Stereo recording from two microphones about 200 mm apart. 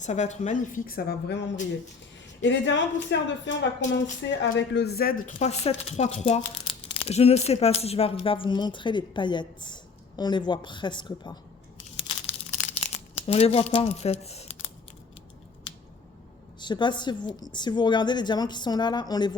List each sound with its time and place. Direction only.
0.0 s a woman's voice: 35° left (ahead or behind)
11.9 s crumpling: 30° left (ahead or behind)
16.6 s speech: 20° left (ahead or behind)